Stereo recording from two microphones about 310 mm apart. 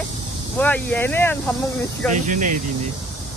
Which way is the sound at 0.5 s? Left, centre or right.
Centre.